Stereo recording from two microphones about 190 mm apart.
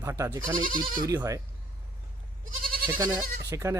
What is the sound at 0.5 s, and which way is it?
Speech, 45° right (ahead or behind).